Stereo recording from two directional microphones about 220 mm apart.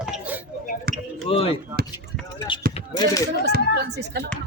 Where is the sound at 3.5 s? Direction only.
45° right (ahead or behind).